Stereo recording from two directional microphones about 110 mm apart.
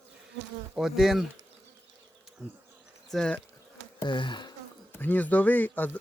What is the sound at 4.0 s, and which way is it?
Speech, 45° left (ahead or behind).